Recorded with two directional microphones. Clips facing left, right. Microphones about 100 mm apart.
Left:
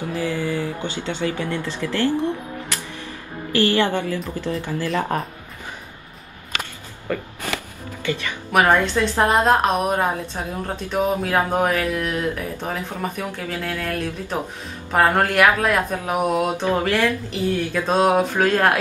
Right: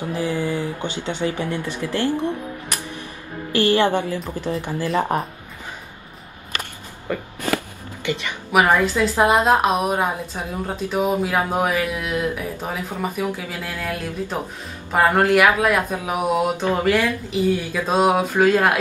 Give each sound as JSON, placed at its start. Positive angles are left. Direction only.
{"t": 0.1, "sound": "speech", "side_deg": -15}
{"t": 3.5, "sound": "a woman's voice", "side_deg": -20}
{"t": 7.1, "sound": "a woman's voice", "side_deg": -15}
{"t": 8.5, "sound": "speech", "side_deg": -10}